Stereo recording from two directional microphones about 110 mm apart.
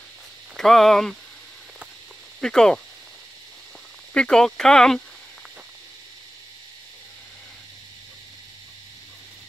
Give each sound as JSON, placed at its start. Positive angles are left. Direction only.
{"t": 0.6, "sound": "speech", "side_deg": 5}
{"t": 2.4, "sound": "speech", "side_deg": 5}
{"t": 4.1, "sound": "speech", "side_deg": 10}